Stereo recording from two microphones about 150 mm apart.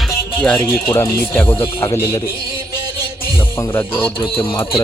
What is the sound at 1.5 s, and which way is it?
Speech, 30° left (ahead or behind).